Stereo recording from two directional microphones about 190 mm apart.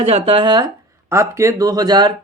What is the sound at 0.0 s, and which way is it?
Speech, 30° right (ahead or behind).